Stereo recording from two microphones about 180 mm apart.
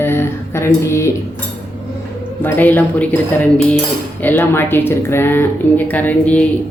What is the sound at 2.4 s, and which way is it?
Speech, 10° left (ahead or behind).